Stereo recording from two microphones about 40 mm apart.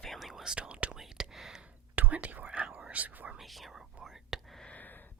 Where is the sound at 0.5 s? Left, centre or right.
Right.